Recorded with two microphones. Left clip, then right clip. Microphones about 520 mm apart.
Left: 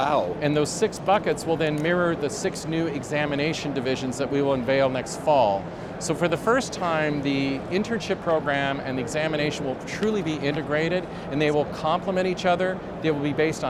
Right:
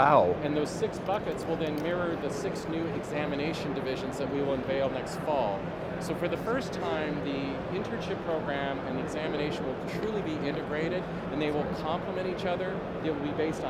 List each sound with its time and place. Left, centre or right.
0.0 s speech: right
0.4 s speech: left